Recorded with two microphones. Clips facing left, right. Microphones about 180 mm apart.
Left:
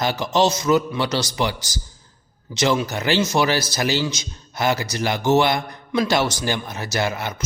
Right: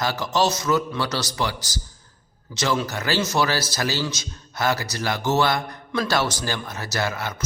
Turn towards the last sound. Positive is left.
turn(degrees=20)  # may be behind; listen again after turning